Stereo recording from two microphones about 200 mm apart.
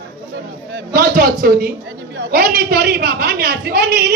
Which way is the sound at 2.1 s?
50° right (ahead or behind).